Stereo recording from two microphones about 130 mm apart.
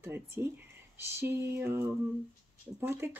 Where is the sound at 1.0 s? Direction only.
20° right (ahead or behind).